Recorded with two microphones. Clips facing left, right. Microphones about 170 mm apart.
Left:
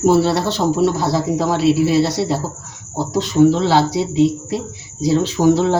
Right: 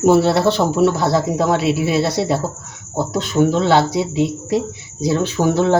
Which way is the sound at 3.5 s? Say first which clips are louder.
Even; 60° right (ahead or behind).